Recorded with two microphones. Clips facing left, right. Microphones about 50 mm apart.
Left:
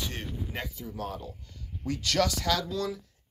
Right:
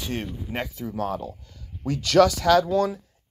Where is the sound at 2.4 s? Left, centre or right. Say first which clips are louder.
Right 10 dB; right.